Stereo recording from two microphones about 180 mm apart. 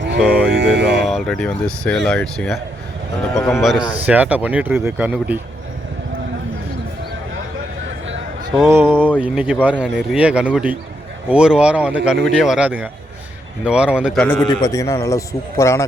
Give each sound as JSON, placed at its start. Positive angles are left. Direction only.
{"t": 0.2, "sound": "speech", "side_deg": -5}
{"t": 0.5, "sound": "speech", "side_deg": -75}
{"t": 1.0, "sound": "speech", "side_deg": 0}
{"t": 3.6, "sound": "speech", "side_deg": 0}
{"t": 8.6, "sound": "speech", "side_deg": -15}
{"t": 14.4, "sound": "speech", "side_deg": 25}